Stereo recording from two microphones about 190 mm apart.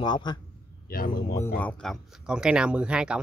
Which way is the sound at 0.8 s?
50° left (ahead or behind).